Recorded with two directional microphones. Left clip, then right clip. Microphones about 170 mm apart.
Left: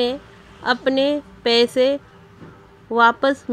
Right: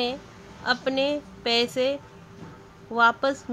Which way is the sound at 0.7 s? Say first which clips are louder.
Left 6 dB; 30° left (ahead or behind).